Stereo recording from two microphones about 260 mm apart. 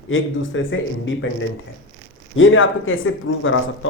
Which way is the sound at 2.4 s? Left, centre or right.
Left.